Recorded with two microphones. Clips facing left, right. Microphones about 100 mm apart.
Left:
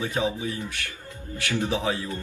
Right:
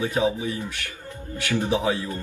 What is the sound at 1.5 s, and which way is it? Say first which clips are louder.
Speech: right 3 dB; 20° right (ahead or behind).